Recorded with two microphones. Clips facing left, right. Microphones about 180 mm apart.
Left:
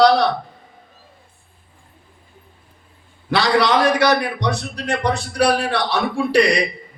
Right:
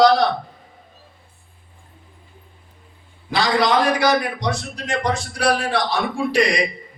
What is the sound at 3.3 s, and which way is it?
A man's voice, 70° left (ahead or behind).